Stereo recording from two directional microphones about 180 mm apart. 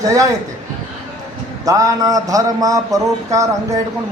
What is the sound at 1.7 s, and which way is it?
A man's voice, 20° right (ahead or behind).